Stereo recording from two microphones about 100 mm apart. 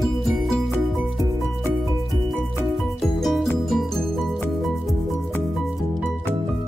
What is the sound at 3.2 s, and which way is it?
Music, centre (ahead or behind).